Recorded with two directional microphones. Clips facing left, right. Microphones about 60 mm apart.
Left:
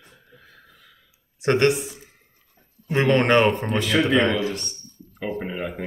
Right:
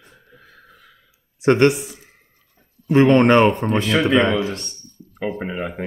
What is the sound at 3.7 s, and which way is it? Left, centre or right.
Speech, right.